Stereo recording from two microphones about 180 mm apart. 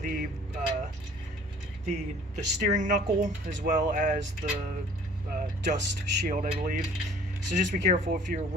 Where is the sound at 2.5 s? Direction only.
45° right (ahead or behind).